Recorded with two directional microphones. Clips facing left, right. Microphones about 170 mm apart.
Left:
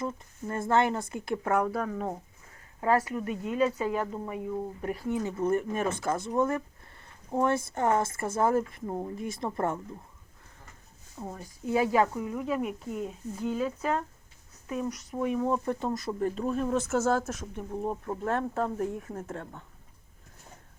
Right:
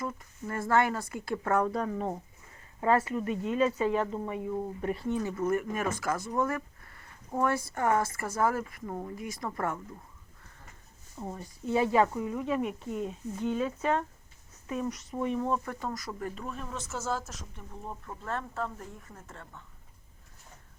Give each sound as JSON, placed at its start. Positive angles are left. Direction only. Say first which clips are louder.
{"t": 0.0, "sound": "speech", "louder": "left 2 dB", "side_deg": 25}
{"t": 1.6, "sound": "speech", "louder": "even", "side_deg": 5}
{"t": 5.2, "sound": "speech", "louder": "left 4 dB", "side_deg": 25}
{"t": 11.2, "sound": "speech", "louder": "even", "side_deg": 0}
{"t": 15.6, "sound": "speech", "louder": "left 6 dB", "side_deg": 25}